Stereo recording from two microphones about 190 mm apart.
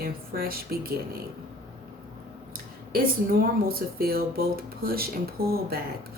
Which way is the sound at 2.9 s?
50° right (ahead or behind).